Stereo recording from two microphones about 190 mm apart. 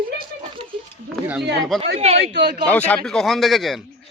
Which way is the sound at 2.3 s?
55° right (ahead or behind).